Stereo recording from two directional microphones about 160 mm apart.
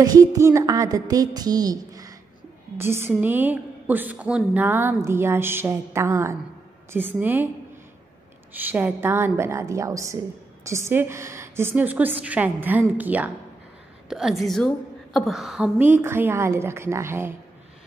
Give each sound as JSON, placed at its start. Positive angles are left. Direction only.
{"t": 0.0, "sound": "a sound", "side_deg": -25}
{"t": 2.8, "sound": "a woman's voice", "side_deg": -15}
{"t": 8.5, "sound": "a woman's voice", "side_deg": -10}